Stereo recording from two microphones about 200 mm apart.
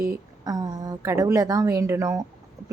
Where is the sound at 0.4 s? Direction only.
20° right (ahead or behind).